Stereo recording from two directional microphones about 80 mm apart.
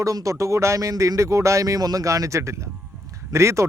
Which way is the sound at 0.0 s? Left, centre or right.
Right.